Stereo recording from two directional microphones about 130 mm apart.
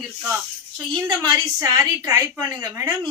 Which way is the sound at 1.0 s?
35° right (ahead or behind).